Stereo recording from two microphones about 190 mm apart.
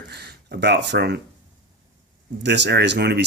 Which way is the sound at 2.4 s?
65° right (ahead or behind).